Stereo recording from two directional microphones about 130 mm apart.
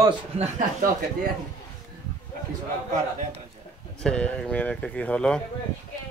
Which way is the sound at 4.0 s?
10° left (ahead or behind).